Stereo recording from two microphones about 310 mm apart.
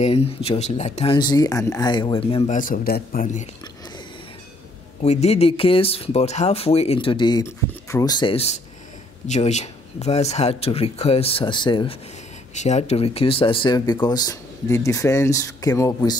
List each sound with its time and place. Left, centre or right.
0.0 s speech: centre
5.0 s speech: left